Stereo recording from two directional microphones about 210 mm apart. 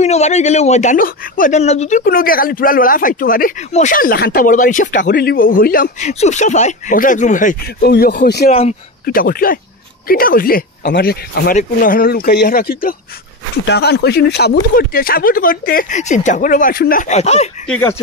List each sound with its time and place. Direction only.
0.0 s speech: 30° left (ahead or behind)
8.5 s speech: 30° left (ahead or behind)
9.0 s speech: 45° left (ahead or behind)
17.6 s speech: 5° left (ahead or behind)